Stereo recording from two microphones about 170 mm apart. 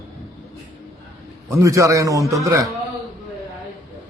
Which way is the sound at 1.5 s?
20° right (ahead or behind).